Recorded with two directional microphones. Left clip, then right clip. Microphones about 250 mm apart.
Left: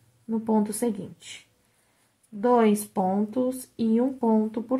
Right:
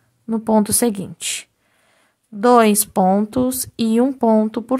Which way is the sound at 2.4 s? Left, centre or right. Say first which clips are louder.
Right 8 dB; right.